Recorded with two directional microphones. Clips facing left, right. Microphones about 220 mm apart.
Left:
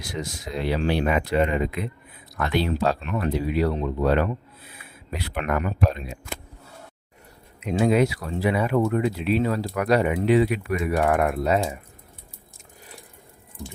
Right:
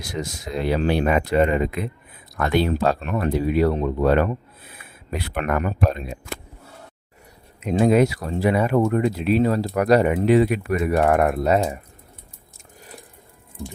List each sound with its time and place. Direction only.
0.1 s speech: 45° right (ahead or behind)
7.6 s speech: 45° right (ahead or behind)